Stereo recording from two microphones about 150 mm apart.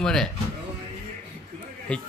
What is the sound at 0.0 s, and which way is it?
Speech, 5° left (ahead or behind).